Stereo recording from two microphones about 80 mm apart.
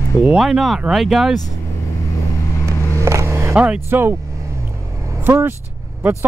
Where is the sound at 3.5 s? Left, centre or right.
Centre.